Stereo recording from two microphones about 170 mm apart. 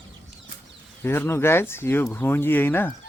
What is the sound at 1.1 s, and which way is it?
Speech, 15° left (ahead or behind).